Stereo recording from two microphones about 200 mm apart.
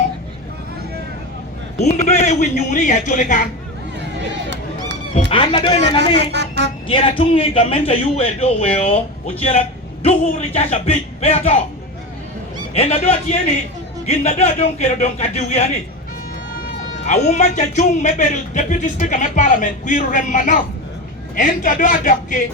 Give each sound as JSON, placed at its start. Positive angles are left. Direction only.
{"t": 1.8, "sound": "a man's voice", "side_deg": 35}
{"t": 5.1, "sound": "a man's voice", "side_deg": 30}
{"t": 6.1, "sound": "speech", "side_deg": -60}
{"t": 6.8, "sound": "a man's voice", "side_deg": 30}
{"t": 12.7, "sound": "a man's voice", "side_deg": 30}
{"t": 17.1, "sound": "a man's voice", "side_deg": 35}